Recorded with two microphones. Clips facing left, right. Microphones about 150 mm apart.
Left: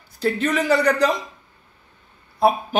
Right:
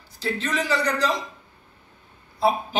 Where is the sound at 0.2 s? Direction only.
55° left (ahead or behind).